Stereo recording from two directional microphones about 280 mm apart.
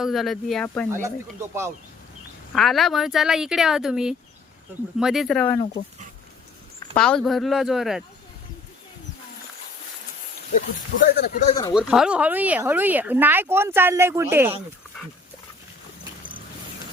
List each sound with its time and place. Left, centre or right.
0.0 s speech: centre
1.0 s speech: centre
6.7 s speech: centre
11.0 s speech: left
11.7 s speech: centre